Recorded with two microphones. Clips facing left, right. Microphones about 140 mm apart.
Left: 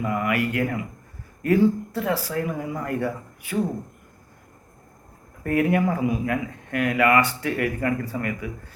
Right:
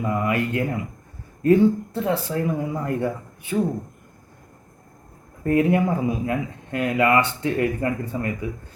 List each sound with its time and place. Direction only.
0.0 s speech: 25° right (ahead or behind)
5.4 s speech: 25° right (ahead or behind)